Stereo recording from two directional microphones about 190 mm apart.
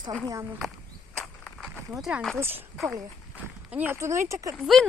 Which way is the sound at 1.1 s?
Centre (ahead or behind).